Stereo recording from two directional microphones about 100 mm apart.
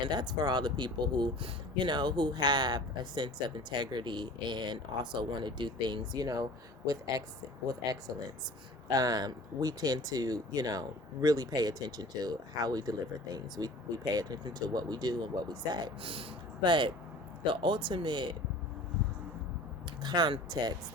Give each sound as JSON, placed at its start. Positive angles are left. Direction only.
{"t": 0.1, "sound": "speech", "side_deg": -50}
{"t": 8.9, "sound": "speech", "side_deg": -40}
{"t": 20.0, "sound": "speech", "side_deg": -45}